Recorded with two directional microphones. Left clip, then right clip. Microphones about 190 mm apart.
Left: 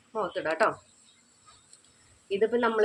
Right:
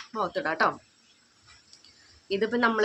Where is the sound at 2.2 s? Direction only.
15° right (ahead or behind).